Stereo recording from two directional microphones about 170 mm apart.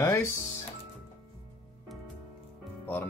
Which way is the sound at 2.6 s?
10° left (ahead or behind).